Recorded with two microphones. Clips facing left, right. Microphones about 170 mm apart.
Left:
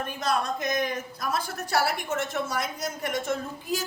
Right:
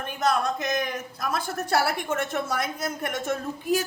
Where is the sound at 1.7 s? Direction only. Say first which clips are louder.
Right 1 dB; 55° right (ahead or behind).